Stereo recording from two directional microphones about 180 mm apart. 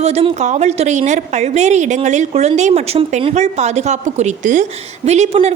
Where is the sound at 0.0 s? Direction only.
35° right (ahead or behind).